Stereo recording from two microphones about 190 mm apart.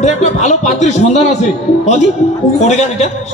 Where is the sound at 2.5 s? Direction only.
35° left (ahead or behind).